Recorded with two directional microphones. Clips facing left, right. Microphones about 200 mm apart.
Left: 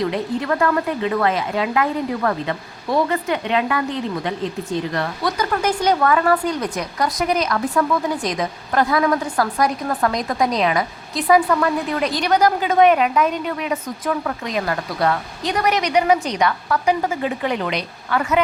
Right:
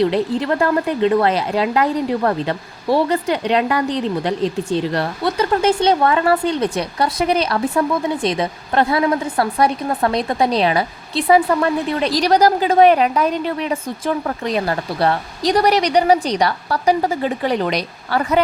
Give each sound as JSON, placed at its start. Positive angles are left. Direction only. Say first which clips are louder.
{"t": 0.0, "sound": "a woman's voice", "louder": "right 5 dB", "side_deg": -30}